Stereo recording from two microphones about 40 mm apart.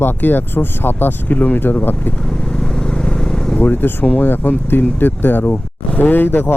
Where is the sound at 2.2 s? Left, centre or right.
Centre.